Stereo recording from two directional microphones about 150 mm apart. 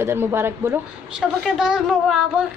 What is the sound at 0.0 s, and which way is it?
Speech, 15° right (ahead or behind).